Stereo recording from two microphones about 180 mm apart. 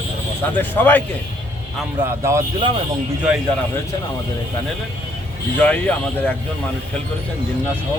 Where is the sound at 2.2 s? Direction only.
15° right (ahead or behind).